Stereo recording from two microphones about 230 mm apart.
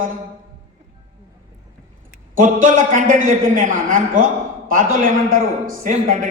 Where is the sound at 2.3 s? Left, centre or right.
Right.